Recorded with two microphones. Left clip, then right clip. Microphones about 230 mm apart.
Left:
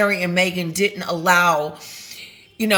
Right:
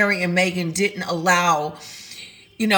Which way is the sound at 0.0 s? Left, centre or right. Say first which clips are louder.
Left 1 dB; centre.